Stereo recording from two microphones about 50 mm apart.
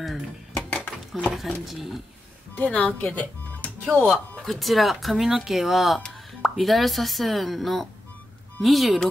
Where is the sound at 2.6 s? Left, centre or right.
Left.